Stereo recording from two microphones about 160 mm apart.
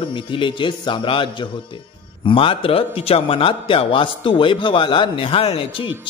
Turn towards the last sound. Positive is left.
turn(degrees=35)  # may be behind; listen again after turning